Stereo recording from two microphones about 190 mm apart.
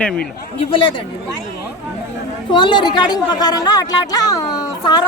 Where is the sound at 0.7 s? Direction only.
25° left (ahead or behind).